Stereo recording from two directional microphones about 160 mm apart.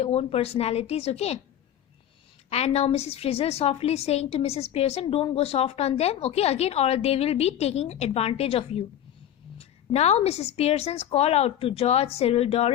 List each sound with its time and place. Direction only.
0.0 s a woman's voice: 40° left (ahead or behind)
2.5 s a woman's voice: 40° left (ahead or behind)